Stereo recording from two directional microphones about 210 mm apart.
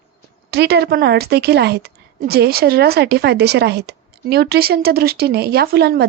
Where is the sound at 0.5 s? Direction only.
50° right (ahead or behind).